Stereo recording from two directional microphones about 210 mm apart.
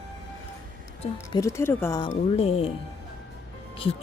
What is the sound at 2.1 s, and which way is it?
Speech, 30° left (ahead or behind).